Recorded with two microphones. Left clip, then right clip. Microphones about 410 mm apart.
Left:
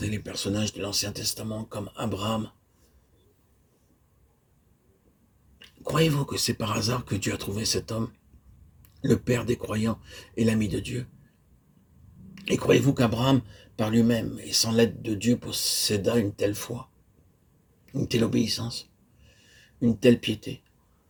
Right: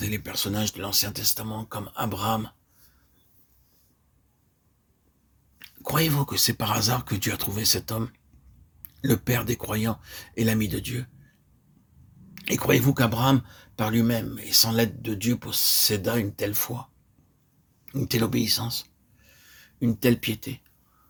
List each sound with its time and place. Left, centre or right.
0.0 s speech: right
5.5 s speech: right
12.3 s speech: right
17.8 s speech: right